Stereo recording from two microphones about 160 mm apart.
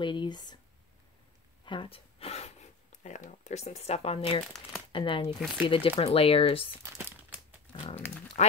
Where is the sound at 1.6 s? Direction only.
35° left (ahead or behind).